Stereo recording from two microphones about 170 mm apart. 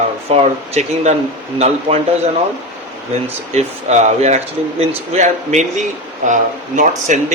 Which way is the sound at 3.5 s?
40° right (ahead or behind).